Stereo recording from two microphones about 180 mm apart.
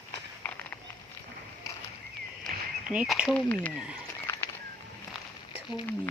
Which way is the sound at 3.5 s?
10° left (ahead or behind).